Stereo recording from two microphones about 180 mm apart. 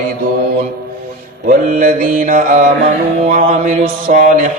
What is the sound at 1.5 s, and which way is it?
Mantra, 50° right (ahead or behind).